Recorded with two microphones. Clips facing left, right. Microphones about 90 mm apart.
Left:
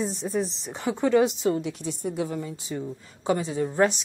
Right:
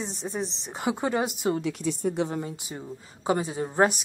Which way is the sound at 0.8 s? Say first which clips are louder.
Left 5 dB; 15° right (ahead or behind).